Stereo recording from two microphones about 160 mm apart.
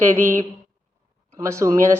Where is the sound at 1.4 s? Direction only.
20° right (ahead or behind).